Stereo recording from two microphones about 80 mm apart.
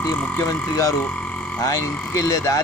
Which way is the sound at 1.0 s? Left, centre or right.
Centre.